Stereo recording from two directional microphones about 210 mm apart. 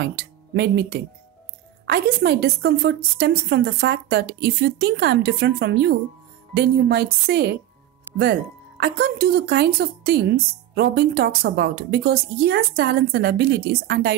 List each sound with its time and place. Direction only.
0.0 s speech: 50° right (ahead or behind)